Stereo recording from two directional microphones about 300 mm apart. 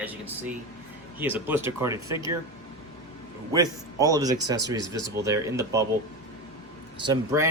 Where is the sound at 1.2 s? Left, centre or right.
Centre.